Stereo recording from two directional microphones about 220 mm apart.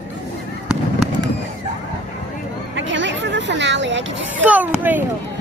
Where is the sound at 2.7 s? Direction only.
55° right (ahead or behind).